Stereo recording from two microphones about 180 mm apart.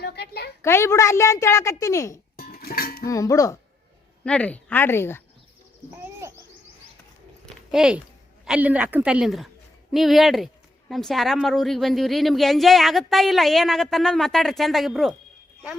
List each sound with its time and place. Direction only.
0.0 s a sound: 65° left (ahead or behind)
0.6 s speech: 15° left (ahead or behind)
2.3 s dishes: 60° left (ahead or behind)
3.1 s speech: 20° left (ahead or behind)
4.2 s speech: 5° left (ahead or behind)
6.0 s bird: 15° right (ahead or behind)
7.4 s a sound: centre (ahead or behind)
8.4 s a woman's voice: 10° right (ahead or behind)